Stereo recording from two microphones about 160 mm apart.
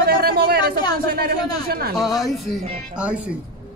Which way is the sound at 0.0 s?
70° right (ahead or behind).